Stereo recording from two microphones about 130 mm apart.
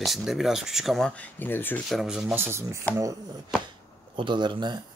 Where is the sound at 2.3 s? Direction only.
20° right (ahead or behind).